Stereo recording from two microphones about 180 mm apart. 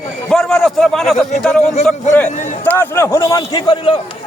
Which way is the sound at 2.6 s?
10° left (ahead or behind).